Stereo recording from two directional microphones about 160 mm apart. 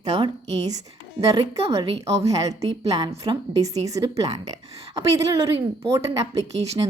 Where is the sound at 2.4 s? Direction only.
20° right (ahead or behind).